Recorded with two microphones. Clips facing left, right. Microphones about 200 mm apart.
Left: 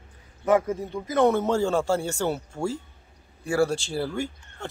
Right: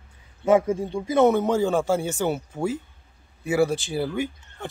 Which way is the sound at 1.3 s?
15° right (ahead or behind).